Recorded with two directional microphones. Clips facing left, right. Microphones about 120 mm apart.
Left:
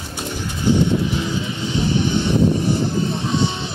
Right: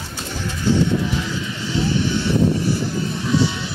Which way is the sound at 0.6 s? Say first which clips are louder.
Left 1 dB; 15° left (ahead or behind).